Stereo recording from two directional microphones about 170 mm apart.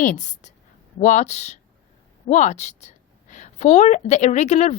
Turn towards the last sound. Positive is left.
turn(degrees=40)  # may be behind; listen again after turning